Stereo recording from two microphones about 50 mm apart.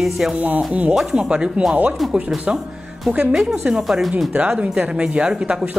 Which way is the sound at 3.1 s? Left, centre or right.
Centre.